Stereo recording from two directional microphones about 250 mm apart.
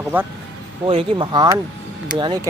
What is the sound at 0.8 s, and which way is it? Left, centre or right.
Speech, right.